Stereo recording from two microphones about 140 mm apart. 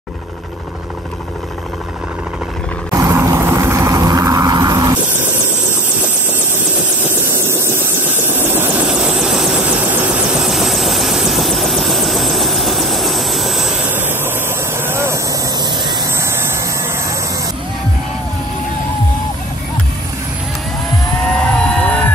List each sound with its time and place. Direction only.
2.9 s vehicle: 20° right (ahead or behind)
7.3 s vehicle: 20° right (ahead or behind)
9.2 s vehicle: 5° right (ahead or behind)
13.8 s engine: 15° right (ahead or behind)
14.8 s vehicle: 20° right (ahead or behind)
16.2 s vehicle: 20° right (ahead or behind)
21.4 s vehicle: 5° left (ahead or behind)